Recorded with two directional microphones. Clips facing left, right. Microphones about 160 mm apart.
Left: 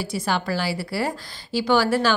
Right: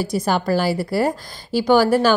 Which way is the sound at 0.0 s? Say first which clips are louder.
Right 5 dB; 40° right (ahead or behind).